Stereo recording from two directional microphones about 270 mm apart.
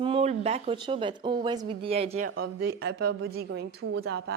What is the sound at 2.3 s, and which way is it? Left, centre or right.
A woman's voice, right.